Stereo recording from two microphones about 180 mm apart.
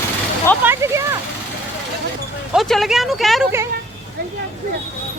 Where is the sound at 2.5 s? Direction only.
Centre (ahead or behind).